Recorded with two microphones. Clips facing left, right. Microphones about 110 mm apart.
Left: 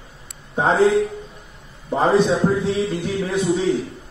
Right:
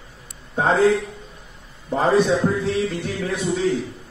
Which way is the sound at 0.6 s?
20° left (ahead or behind).